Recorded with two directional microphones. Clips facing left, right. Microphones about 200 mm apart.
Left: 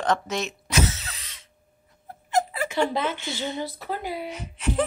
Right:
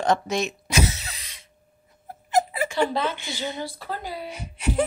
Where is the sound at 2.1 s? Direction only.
10° right (ahead or behind).